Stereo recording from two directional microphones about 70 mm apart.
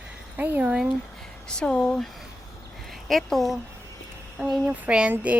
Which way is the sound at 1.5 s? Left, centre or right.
Centre.